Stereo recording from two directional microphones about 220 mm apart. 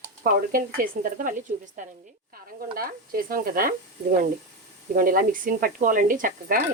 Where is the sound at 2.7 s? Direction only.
40° right (ahead or behind).